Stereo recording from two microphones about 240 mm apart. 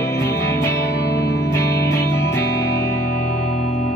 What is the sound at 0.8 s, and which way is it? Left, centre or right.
Music, left.